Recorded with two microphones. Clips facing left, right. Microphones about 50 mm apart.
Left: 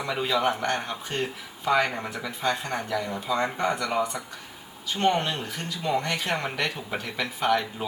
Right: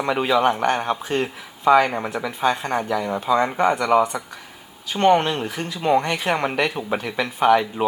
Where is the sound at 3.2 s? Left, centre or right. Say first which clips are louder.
Right 9 dB; right.